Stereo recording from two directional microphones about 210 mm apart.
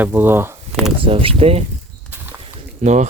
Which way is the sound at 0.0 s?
10° right (ahead or behind).